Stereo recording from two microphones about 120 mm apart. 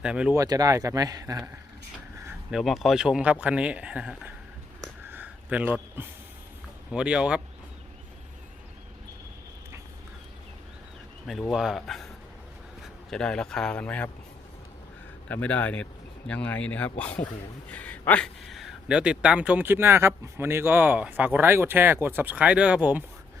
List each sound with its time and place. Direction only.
0.0 s speech: 10° right (ahead or behind)
0.3 s speech: 30° right (ahead or behind)
2.5 s speech: centre (ahead or behind)
5.0 s a sound: 15° right (ahead or behind)
6.9 s speech: 10° right (ahead or behind)
11.3 s speech: centre (ahead or behind)
15.3 s speech: 10° left (ahead or behind); by 23.0 s 10° right (ahead or behind)